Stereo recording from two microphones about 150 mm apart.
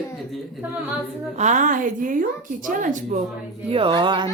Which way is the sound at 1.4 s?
55° right (ahead or behind).